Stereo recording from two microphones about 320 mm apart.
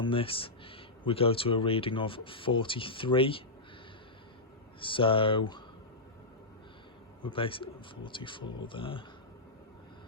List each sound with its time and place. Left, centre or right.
0.0 s speech: centre
4.8 s speech: centre
7.2 s speech: centre